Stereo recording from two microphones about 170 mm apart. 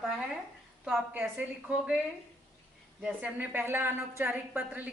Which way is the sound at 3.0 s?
10° right (ahead or behind).